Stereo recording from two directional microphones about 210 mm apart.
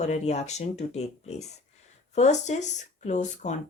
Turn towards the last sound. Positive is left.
turn(degrees=35)  # may be behind; listen again after turning